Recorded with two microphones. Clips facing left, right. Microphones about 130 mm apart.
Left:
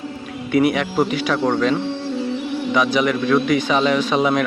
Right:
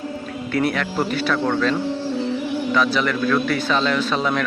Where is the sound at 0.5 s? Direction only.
10° left (ahead or behind).